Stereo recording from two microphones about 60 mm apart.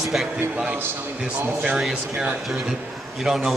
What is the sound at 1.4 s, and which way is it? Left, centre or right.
Speech, right.